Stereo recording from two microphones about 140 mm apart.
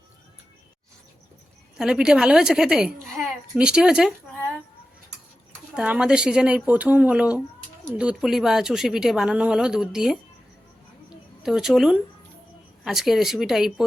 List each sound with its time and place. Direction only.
1.8 s a woman's voice: 5° right (ahead or behind)
5.7 s a woman's voice: 5° right (ahead or behind)
11.4 s a woman's voice: 5° right (ahead or behind)